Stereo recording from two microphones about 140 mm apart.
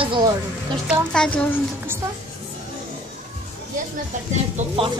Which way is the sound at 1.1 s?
5° left (ahead or behind).